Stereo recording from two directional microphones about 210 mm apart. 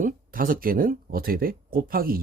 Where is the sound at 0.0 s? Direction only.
40° right (ahead or behind).